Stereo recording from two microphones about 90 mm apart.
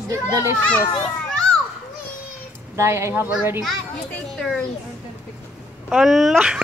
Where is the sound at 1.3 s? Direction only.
5° left (ahead or behind).